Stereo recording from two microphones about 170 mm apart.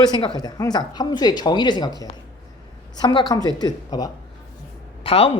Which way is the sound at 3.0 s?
25° left (ahead or behind).